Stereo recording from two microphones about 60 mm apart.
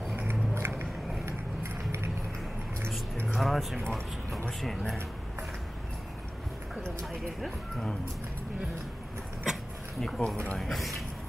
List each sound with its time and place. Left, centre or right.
0.3 s a sound: right
3.3 s speech: centre
7.1 s speech: centre
9.4 s a sound: centre
10.0 s speech: centre
10.6 s speech: centre